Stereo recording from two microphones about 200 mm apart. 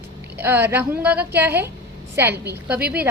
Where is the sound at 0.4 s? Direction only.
10° right (ahead or behind).